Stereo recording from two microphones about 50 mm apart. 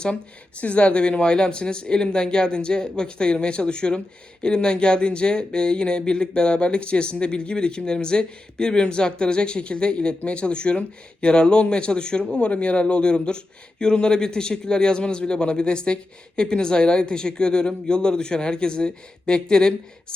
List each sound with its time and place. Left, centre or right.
0.6 s speech: left